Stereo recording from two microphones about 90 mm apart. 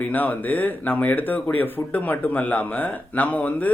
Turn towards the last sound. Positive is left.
turn(degrees=15)  # may be behind; listen again after turning